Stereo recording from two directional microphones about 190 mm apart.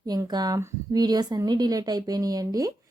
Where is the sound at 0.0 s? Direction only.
20° right (ahead or behind).